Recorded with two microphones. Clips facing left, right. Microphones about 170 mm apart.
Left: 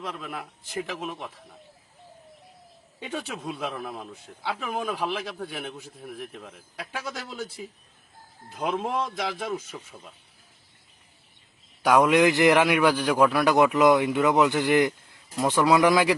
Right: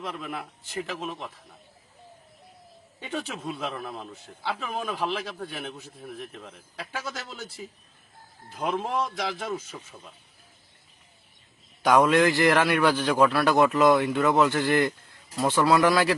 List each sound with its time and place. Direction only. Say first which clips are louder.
0.0 s a man's voice: right 1 dB; 5° right (ahead or behind)
3.0 s a man's voice: even; centre (ahead or behind)
8.5 s a man's voice: even; 5° left (ahead or behind)
11.8 s a man's voice: left 1 dB; 10° left (ahead or behind)